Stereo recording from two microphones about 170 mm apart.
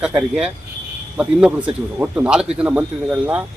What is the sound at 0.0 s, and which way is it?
A man's voice, 5° right (ahead or behind).